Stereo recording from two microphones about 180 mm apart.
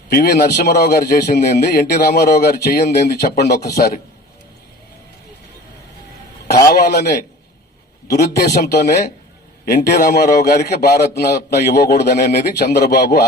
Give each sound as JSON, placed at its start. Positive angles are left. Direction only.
{"t": 0.1, "sound": "a man's voice", "side_deg": 55}
{"t": 6.7, "sound": "a man's voice", "side_deg": 60}
{"t": 9.6, "sound": "a man's voice", "side_deg": 60}